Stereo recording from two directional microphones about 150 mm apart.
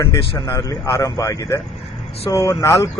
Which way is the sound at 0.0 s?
20° left (ahead or behind).